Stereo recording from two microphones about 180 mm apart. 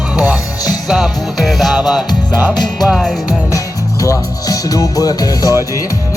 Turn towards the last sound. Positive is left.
turn(degrees=20)  # may be behind; listen again after turning